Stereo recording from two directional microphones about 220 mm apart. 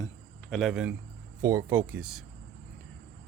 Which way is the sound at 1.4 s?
15° right (ahead or behind).